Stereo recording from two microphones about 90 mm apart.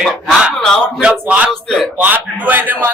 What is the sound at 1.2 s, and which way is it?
A man's voice, 15° right (ahead or behind).